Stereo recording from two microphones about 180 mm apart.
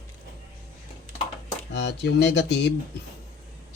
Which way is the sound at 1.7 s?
75° left (ahead or behind).